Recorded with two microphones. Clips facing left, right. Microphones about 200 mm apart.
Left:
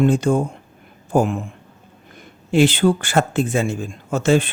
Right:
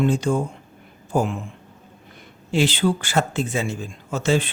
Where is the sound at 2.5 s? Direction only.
55° left (ahead or behind).